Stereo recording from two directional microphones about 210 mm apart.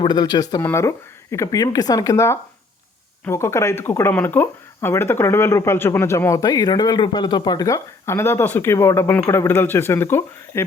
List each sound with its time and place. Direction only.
0.0 s speech: 20° left (ahead or behind)